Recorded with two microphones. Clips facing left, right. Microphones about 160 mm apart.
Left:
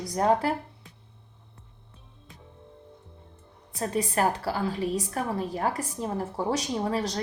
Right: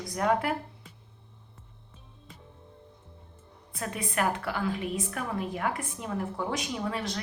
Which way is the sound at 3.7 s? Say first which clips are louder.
Left 5 dB; 35° left (ahead or behind).